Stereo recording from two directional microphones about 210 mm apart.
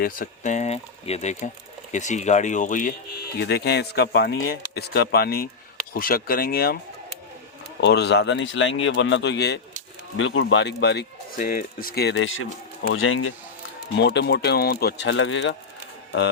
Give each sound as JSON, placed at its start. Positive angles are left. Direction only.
{"t": 0.0, "sound": "speech", "side_deg": 40}
{"t": 3.3, "sound": "speech", "side_deg": 50}
{"t": 7.8, "sound": "speech", "side_deg": 55}
{"t": 10.2, "sound": "speech", "side_deg": 70}
{"t": 11.3, "sound": "speech", "side_deg": 45}
{"t": 14.0, "sound": "speech", "side_deg": 55}